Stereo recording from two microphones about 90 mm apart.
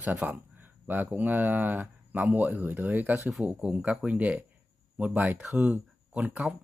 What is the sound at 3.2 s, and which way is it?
Speech, 10° right (ahead or behind).